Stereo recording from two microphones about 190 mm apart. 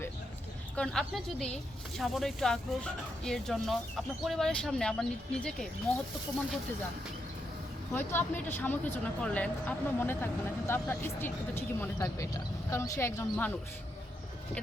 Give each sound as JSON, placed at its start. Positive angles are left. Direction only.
{"t": 0.8, "sound": "speech", "side_deg": 5}
{"t": 7.9, "sound": "speech", "side_deg": 10}